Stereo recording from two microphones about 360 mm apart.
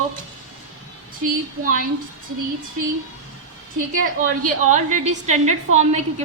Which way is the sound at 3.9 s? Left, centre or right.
Right.